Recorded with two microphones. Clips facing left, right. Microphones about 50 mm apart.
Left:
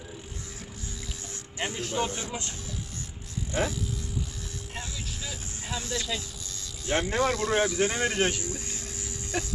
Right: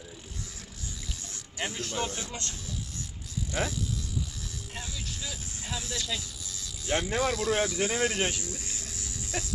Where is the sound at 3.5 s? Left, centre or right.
Centre.